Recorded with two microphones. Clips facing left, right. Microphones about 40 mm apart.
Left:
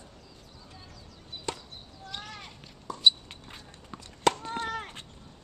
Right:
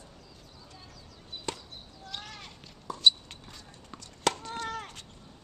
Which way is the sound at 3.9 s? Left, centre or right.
Centre.